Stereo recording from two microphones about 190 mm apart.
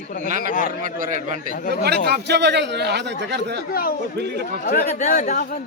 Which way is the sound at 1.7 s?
60° right (ahead or behind).